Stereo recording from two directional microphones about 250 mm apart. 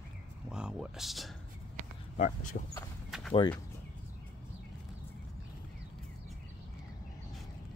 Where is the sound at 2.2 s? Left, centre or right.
Left.